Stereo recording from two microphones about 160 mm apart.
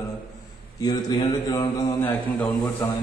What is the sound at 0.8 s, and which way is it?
Speech, 25° left (ahead or behind).